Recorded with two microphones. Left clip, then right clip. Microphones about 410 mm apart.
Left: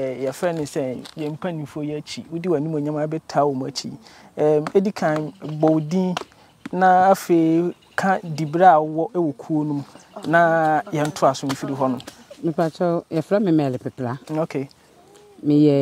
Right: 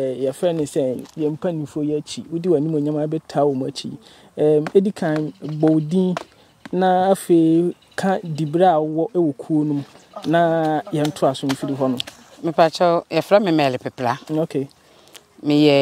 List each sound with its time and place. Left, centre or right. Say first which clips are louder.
0.0 s speech: right 3 dB; left
12.0 s speech: right 2 dB; right
14.3 s speech: right 2 dB; left
15.5 s speech: right 2 dB; right